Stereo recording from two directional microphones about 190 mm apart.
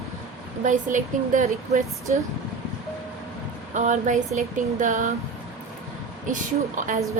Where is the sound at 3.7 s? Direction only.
40° right (ahead or behind).